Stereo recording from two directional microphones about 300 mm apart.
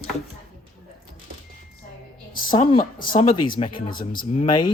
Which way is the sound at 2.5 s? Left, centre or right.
Centre.